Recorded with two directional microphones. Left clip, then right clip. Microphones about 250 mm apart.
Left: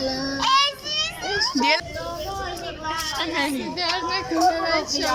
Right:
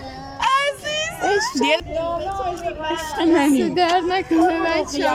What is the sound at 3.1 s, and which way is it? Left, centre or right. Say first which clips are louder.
Speech: right 12 dB; right.